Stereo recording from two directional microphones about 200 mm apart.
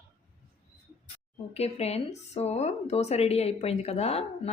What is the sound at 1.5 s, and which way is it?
A woman's voice, 30° left (ahead or behind).